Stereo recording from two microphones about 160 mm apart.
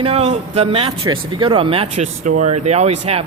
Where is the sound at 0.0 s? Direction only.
40° right (ahead or behind).